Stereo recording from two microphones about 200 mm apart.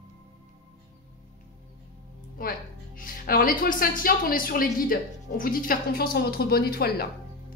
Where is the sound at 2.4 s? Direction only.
45° left (ahead or behind).